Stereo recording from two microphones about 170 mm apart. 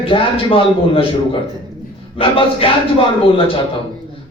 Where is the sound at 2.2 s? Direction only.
30° left (ahead or behind).